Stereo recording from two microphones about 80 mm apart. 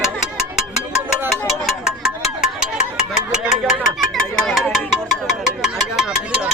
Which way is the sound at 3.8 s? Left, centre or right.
Centre.